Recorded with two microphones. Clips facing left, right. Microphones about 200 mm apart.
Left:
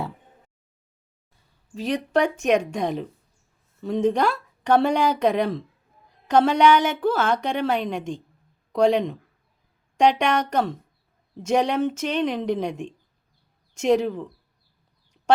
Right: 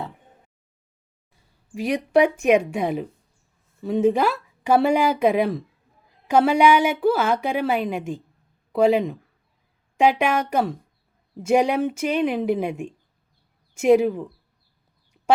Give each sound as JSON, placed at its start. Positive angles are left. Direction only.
{"t": 1.7, "sound": "a woman's voice", "side_deg": -10}